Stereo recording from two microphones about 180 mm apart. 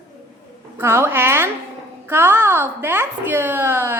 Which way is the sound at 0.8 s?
15° right (ahead or behind).